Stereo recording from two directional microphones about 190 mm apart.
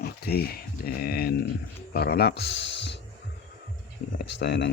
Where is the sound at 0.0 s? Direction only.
55° left (ahead or behind).